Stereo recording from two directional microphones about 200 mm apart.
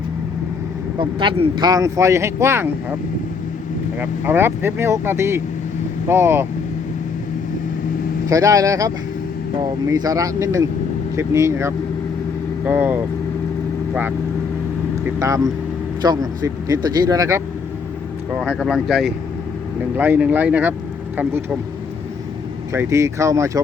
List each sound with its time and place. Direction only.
0.9 s speech: 25° right (ahead or behind)
4.0 s speech: 10° right (ahead or behind)
8.3 s speech: 15° right (ahead or behind)
15.0 s speech: 15° right (ahead or behind)
18.3 s speech: centre (ahead or behind)
22.7 s speech: 15° right (ahead or behind)